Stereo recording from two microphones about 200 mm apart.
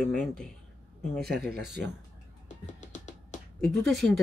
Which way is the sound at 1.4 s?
55° right (ahead or behind).